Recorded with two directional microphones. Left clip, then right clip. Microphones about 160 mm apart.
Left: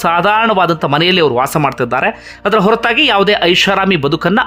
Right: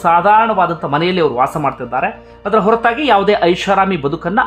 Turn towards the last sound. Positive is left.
turn(degrees=25)  # may be behind; listen again after turning